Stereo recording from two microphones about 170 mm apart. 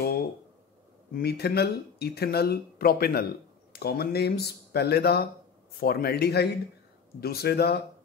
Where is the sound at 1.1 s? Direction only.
70° left (ahead or behind).